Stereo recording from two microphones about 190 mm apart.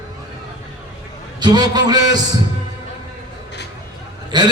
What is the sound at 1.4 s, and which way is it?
Speech, 20° right (ahead or behind).